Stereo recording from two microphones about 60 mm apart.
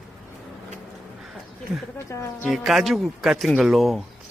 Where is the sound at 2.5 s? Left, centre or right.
Centre.